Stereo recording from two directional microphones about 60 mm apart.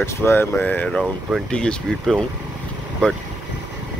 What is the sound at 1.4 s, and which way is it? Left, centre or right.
Speech, centre.